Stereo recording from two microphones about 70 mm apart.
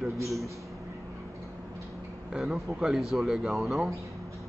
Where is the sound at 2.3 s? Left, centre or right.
Centre.